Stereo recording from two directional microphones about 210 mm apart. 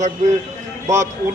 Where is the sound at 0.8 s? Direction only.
15° right (ahead or behind).